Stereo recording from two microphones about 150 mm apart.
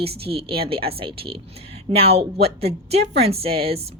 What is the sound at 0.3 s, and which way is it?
A woman's voice, 40° right (ahead or behind).